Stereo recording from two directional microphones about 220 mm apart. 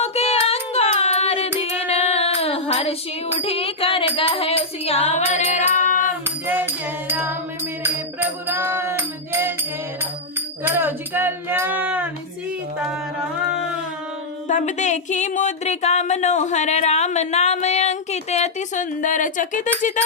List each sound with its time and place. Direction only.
0.0 s music: 30° left (ahead or behind)
6.5 s music: 10° right (ahead or behind)
10.6 s a sound: 10° right (ahead or behind)
14.4 s speech: 35° left (ahead or behind)